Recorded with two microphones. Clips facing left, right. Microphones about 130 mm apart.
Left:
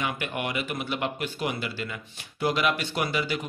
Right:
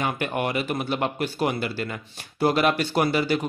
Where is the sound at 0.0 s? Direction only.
40° right (ahead or behind).